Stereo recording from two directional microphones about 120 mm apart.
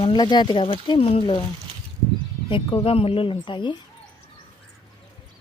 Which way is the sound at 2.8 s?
50° left (ahead or behind).